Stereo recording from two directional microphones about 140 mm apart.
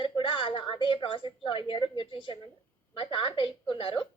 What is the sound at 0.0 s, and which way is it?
A woman's voice, 40° left (ahead or behind).